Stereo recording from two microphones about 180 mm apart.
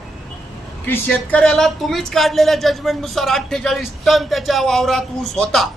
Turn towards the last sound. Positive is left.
turn(degrees=0)  # may be behind; listen again after turning